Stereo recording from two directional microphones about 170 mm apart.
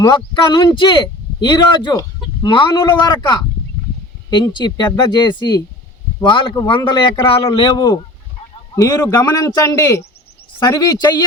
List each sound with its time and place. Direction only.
0.0 s speech: 25° left (ahead or behind)